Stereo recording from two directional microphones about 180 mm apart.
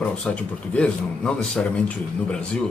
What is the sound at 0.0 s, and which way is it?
Speech, 5° left (ahead or behind).